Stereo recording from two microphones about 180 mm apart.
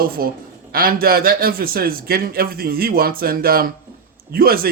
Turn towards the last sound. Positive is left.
turn(degrees=-55)  # may be behind; listen again after turning